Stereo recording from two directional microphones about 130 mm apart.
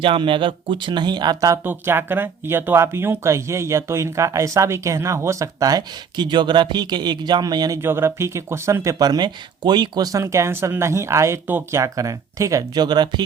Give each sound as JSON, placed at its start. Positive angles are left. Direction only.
{"t": 0.0, "sound": "speech", "side_deg": -40}
{"t": 1.6, "sound": "speech", "side_deg": -15}
{"t": 7.8, "sound": "speech", "side_deg": -20}